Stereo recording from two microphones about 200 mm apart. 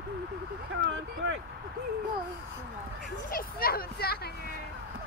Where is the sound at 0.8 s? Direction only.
65° right (ahead or behind).